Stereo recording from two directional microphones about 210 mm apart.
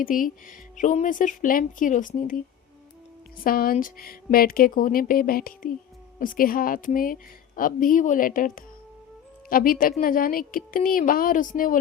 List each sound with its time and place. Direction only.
0.0 s a woman's voice: 40° left (ahead or behind)
3.4 s a woman's voice: 45° left (ahead or behind)